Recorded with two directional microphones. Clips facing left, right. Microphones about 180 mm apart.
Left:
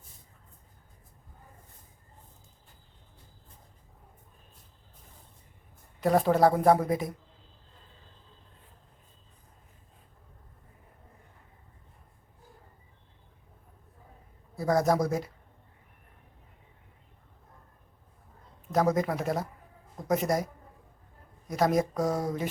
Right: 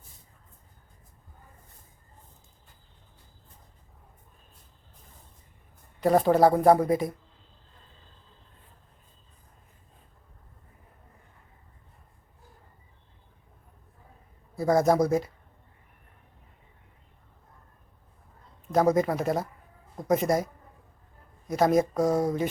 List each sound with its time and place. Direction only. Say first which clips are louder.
6.0 s a woman's voice: right 3 dB; centre (ahead or behind)
14.5 s a woman's voice: right 3 dB; centre (ahead or behind)
18.7 s a woman's voice: right 3 dB; centre (ahead or behind)
22.0 s speech: right 5 dB; 20° right (ahead or behind)